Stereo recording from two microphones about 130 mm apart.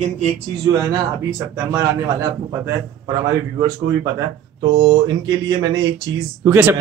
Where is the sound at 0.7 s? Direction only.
30° right (ahead or behind).